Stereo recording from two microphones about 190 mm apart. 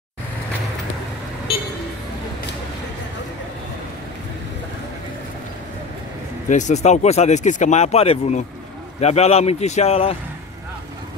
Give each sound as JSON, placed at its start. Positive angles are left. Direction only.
{"t": 6.5, "sound": "speech", "side_deg": 40}